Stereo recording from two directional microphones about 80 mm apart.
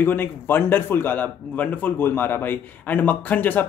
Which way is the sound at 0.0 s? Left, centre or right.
Left.